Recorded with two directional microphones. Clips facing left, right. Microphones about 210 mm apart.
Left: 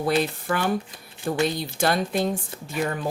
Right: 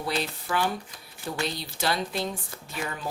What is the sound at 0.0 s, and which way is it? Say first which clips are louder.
Speech: left 7 dB; 50° left (ahead or behind).